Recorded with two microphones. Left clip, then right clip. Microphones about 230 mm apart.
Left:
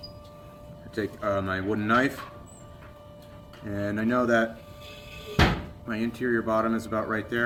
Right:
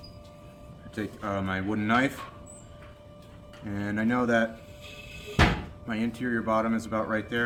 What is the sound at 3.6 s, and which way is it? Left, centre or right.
Speech, centre.